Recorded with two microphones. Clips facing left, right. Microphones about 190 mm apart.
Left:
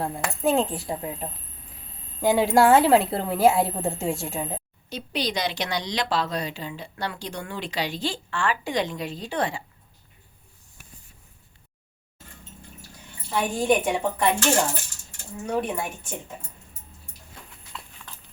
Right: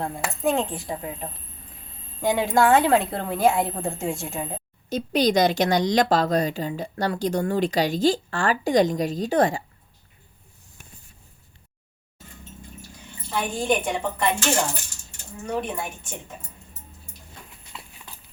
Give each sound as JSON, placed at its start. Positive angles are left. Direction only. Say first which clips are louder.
{"t": 0.0, "sound": "a woman's voice", "louder": "even", "side_deg": 5}
{"t": 4.9, "sound": "a woman's voice", "louder": "right 8 dB", "side_deg": -45}
{"t": 13.3, "sound": "a woman's voice", "louder": "left 2 dB", "side_deg": 5}
{"t": 15.4, "sound": "a woman's voice", "louder": "left 1 dB", "side_deg": 10}
{"t": 17.7, "sound": "clip-clop", "louder": "even", "side_deg": -10}